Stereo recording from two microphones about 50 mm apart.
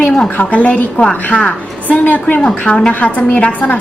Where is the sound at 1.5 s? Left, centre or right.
Left.